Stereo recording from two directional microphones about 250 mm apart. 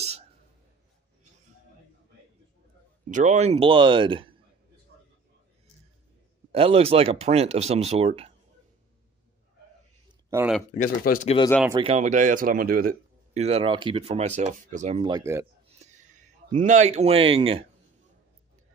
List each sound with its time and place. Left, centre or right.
3.1 s speech: right
6.5 s speech: right
10.3 s speech: centre
10.7 s speech: left
11.7 s speech: right
15.8 s speech: right